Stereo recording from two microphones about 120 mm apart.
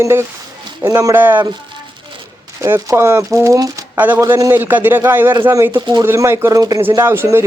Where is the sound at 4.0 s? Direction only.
15° right (ahead or behind).